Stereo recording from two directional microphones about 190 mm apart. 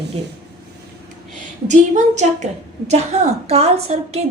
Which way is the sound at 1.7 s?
40° right (ahead or behind).